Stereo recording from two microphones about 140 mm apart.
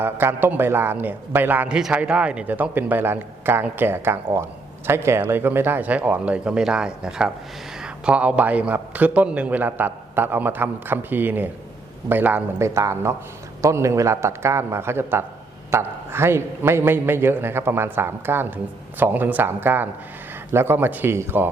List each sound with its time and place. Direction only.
0.0 s a man's voice: 15° right (ahead or behind)